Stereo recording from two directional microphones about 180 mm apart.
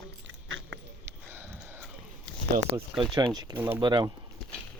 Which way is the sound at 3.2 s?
20° right (ahead or behind).